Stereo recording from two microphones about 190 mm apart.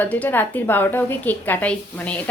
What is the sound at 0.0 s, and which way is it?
A woman's voice, 10° left (ahead or behind).